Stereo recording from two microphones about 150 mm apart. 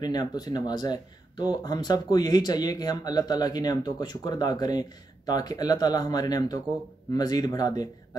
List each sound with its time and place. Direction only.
0.0 s speech: 25° left (ahead or behind)